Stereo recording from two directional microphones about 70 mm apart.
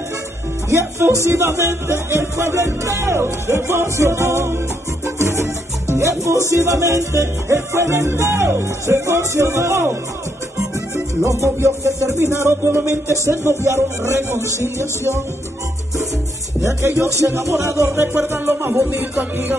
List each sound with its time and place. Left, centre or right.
0.7 s music: right
11.6 s music: right
16.6 s music: right